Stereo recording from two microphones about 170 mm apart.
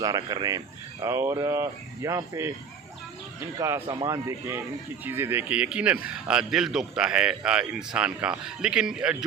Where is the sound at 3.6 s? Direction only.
20° right (ahead or behind).